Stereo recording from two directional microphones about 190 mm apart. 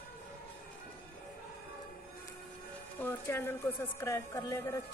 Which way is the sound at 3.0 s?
10° left (ahead or behind).